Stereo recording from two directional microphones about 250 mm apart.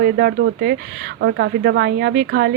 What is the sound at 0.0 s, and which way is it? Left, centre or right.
Speech, right.